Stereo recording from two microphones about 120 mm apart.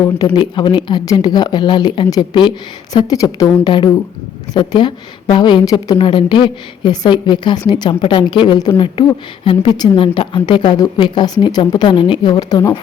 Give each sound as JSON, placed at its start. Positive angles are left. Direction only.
{"t": 0.3, "sound": "a woman's voice", "side_deg": 40}
{"t": 6.0, "sound": "a woman's voice", "side_deg": 45}
{"t": 8.8, "sound": "a woman's voice", "side_deg": 45}